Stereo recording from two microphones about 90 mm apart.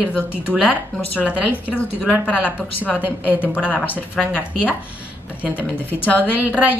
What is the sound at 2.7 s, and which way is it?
Speech, 20° left (ahead or behind).